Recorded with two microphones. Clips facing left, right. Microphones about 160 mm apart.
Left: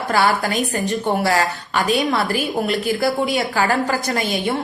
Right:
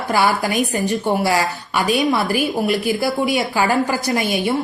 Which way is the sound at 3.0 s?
Centre (ahead or behind).